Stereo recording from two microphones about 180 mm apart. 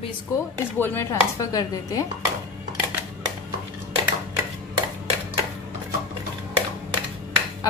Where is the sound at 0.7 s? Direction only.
10° left (ahead or behind).